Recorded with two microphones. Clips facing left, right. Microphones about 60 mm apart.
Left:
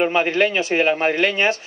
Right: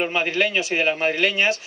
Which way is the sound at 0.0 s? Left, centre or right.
Left.